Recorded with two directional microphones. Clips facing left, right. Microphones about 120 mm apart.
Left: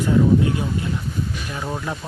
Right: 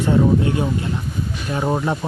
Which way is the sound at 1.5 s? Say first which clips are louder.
Right 9 dB; 35° right (ahead or behind).